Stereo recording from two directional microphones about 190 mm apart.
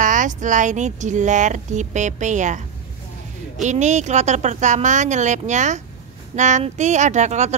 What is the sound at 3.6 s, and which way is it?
A woman's voice, 40° right (ahead or behind).